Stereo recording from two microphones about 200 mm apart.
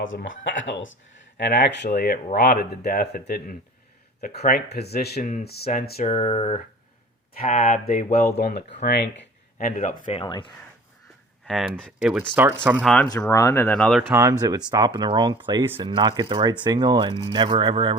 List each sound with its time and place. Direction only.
0.2 s speech: 70° left (ahead or behind)
1.4 s speech: 55° left (ahead or behind)
5.2 s speech: 35° left (ahead or behind)
5.5 s speech: 50° left (ahead or behind)
6.0 s speech: 30° left (ahead or behind)
7.3 s speech: 40° left (ahead or behind); by 10.5 s 25° left (ahead or behind)
11.4 s speech: centre (ahead or behind)
13.1 s speech: 15° left (ahead or behind)
14.1 s speech: 15° right (ahead or behind)